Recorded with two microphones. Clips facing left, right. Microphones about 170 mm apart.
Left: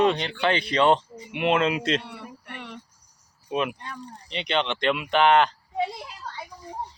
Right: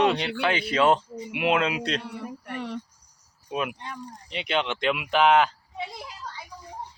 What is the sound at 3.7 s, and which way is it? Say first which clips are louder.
Speech: right 1 dB; 15° right (ahead or behind).